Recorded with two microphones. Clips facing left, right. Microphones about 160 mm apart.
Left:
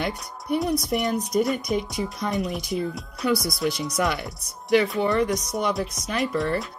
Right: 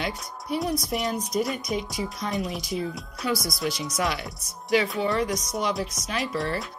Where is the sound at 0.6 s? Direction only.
Centre (ahead or behind).